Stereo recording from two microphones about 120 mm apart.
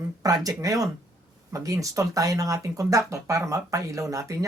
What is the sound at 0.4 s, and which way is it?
Speech, 30° right (ahead or behind).